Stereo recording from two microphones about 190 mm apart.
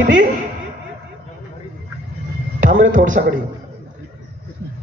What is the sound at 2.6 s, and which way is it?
Speech, 45° right (ahead or behind).